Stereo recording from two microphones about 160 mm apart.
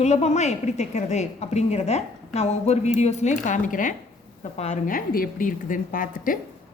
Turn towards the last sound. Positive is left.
turn(degrees=60)  # may be behind; listen again after turning